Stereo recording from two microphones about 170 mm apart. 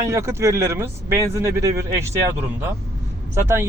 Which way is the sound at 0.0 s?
15° right (ahead or behind).